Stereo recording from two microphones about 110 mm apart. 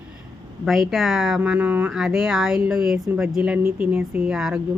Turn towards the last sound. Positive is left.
turn(degrees=-5)  # may be behind; listen again after turning